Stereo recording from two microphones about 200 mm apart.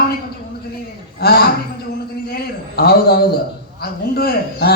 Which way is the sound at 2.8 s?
50° left (ahead or behind).